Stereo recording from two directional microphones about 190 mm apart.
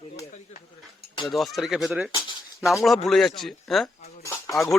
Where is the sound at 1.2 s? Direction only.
Centre (ahead or behind).